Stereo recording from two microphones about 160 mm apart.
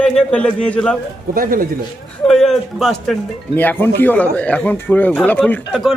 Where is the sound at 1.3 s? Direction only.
60° right (ahead or behind).